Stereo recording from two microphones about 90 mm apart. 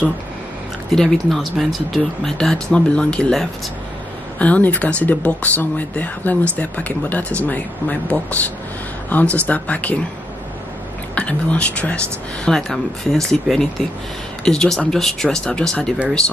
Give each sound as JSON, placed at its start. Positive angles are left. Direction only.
{"t": 0.9, "sound": "speech", "side_deg": 5}
{"t": 11.1, "sound": "speech", "side_deg": 15}